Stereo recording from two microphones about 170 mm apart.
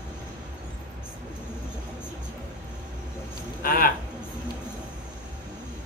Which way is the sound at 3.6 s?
60° left (ahead or behind).